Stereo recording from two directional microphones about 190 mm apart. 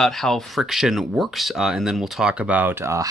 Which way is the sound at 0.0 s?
Centre (ahead or behind).